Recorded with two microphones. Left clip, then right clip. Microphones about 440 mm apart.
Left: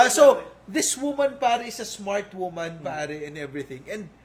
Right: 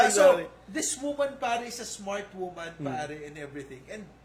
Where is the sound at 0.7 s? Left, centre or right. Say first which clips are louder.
Left 7 dB; left.